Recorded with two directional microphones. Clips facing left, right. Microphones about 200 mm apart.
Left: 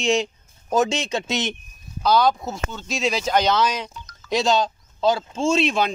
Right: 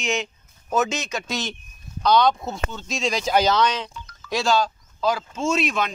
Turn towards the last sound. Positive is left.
turn(degrees=30)  # may be behind; listen again after turning